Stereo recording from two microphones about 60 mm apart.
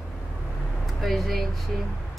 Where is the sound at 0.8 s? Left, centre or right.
Centre.